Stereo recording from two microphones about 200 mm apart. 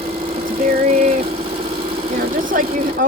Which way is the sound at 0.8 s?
30° right (ahead or behind).